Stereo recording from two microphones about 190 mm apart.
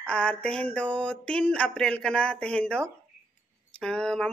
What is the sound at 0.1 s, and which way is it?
A woman's voice, 5° left (ahead or behind).